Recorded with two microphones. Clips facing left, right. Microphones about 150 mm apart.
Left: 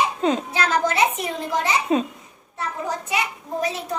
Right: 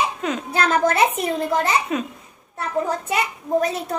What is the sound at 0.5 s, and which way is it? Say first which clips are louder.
Speech: right 3 dB; 55° right (ahead or behind).